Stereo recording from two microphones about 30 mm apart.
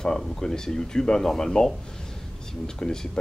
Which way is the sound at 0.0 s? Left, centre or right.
Left.